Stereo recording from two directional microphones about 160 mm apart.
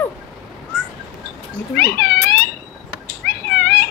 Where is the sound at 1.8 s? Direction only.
90° left.